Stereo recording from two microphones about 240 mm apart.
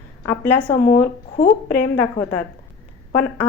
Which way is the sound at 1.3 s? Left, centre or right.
Left.